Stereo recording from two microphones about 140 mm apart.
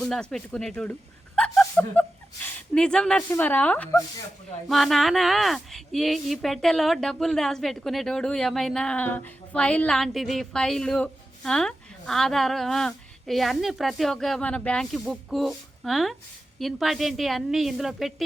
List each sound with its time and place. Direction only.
0.0 s speech: 5° left (ahead or behind)
4.7 s speech: centre (ahead or behind)